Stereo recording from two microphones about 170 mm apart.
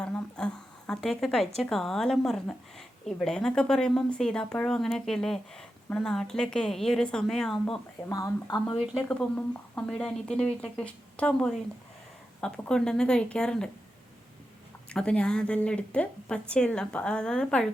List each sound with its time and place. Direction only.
0.0 s a woman's voice: 5° left (ahead or behind)
8.1 s speech: 20° left (ahead or behind)
9.0 s a woman's voice: 10° left (ahead or behind)
14.8 s a woman's voice: 5° left (ahead or behind)